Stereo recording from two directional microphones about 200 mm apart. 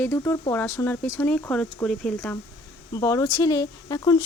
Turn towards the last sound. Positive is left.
turn(degrees=20)  # may be behind; listen again after turning